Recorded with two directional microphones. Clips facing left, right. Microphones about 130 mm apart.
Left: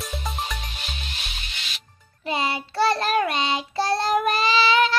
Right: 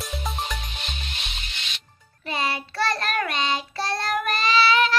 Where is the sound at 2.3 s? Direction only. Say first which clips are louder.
Left 2 dB; 25° left (ahead or behind).